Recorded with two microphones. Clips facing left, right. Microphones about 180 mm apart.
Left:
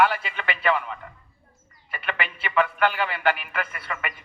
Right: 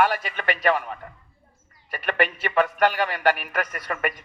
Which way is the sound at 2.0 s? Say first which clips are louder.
Right 7 dB; 45° right (ahead or behind).